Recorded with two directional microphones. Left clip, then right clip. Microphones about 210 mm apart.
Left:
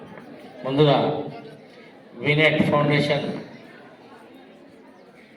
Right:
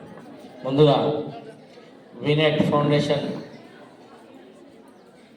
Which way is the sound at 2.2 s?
60° right (ahead or behind).